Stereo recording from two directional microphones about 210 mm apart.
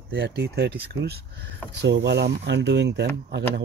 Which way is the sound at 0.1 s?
50° right (ahead or behind).